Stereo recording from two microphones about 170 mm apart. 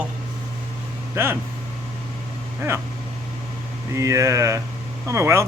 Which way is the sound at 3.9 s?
20° right (ahead or behind).